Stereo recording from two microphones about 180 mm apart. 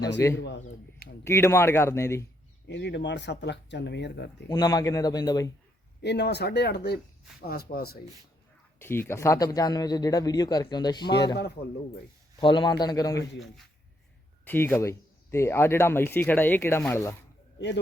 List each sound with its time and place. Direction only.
0.3 s a sound: 75° left (ahead or behind)
1.2 s speech: 15° left (ahead or behind)
2.6 s speech: 75° left (ahead or behind)
4.4 s speech: 25° left (ahead or behind)
6.0 s speech: 70° left (ahead or behind)
8.8 s speech: 15° left (ahead or behind)
12.4 s speech: 25° left (ahead or behind)
14.4 s speech: 10° left (ahead or behind)